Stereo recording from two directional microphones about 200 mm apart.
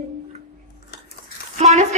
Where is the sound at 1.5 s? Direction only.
35° right (ahead or behind).